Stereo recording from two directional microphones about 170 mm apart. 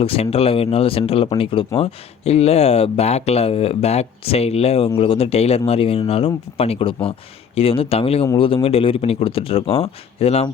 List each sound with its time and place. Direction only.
0.0 s speech: 35° left (ahead or behind)